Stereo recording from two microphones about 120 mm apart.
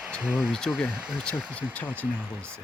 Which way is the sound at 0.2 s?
5° right (ahead or behind).